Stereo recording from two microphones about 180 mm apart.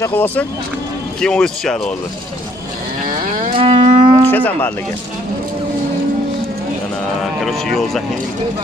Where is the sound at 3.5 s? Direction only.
30° right (ahead or behind).